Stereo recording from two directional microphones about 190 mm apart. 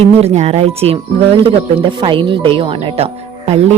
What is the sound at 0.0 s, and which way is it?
Speech, 35° right (ahead or behind).